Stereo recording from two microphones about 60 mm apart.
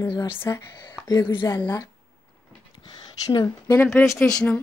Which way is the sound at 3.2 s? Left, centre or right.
Left.